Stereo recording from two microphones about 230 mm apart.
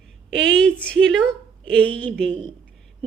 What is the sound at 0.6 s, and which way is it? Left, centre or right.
A woman's voice, centre.